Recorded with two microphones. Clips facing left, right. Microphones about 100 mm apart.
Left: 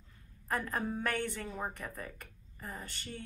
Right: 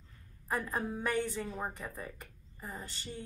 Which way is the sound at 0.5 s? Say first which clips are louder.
Even; 10° right (ahead or behind).